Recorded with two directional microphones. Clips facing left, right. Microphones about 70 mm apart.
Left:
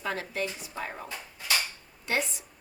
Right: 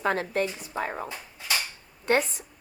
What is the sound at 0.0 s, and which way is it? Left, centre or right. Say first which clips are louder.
A woman's voice: right 6 dB; right.